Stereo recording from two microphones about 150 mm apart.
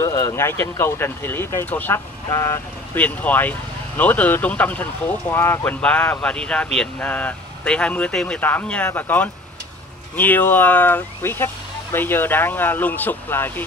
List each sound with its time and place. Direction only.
0.0 s speech: 20° left (ahead or behind)